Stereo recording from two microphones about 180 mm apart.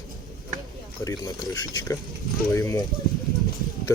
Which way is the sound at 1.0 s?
20° left (ahead or behind).